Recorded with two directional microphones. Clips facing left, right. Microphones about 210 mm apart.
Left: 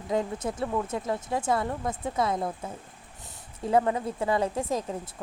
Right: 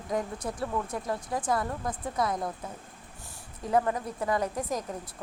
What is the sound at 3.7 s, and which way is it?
Speech, 25° left (ahead or behind).